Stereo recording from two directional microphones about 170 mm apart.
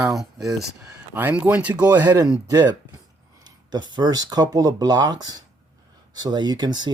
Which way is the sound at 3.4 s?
25° right (ahead or behind).